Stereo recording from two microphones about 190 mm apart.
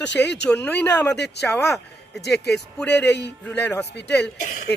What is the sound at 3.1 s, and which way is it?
Speech, 65° left (ahead or behind).